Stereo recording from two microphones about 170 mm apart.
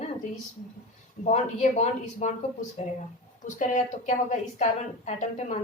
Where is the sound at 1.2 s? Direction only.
40° left (ahead or behind).